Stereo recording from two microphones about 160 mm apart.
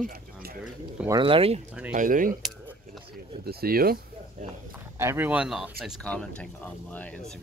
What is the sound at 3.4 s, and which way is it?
Speech, 70° right (ahead or behind).